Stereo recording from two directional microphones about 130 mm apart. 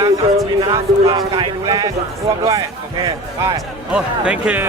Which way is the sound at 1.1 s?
35° right (ahead or behind).